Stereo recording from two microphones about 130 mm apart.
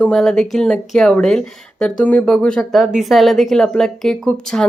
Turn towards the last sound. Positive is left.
turn(degrees=5)  # may be behind; listen again after turning